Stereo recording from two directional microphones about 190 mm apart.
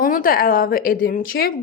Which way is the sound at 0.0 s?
45° left (ahead or behind).